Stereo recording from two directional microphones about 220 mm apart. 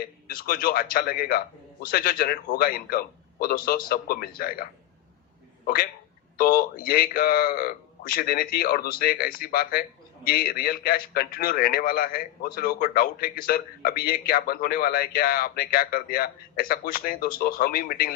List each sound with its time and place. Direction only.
0.3 s a man's voice: 40° left (ahead or behind)